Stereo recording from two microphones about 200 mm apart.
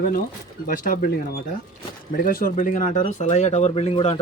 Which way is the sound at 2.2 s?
45° left (ahead or behind).